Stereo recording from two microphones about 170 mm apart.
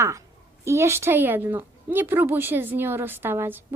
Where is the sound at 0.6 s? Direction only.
15° right (ahead or behind).